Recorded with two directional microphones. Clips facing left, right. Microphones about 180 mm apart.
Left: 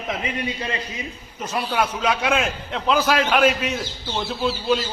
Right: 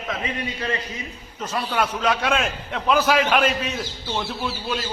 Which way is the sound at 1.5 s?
10° left (ahead or behind).